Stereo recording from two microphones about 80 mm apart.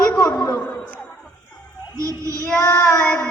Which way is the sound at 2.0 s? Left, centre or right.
Right.